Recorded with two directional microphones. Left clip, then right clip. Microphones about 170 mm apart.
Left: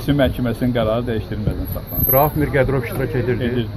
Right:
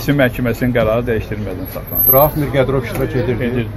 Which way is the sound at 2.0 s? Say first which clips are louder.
Right 4 dB; 55° left (ahead or behind).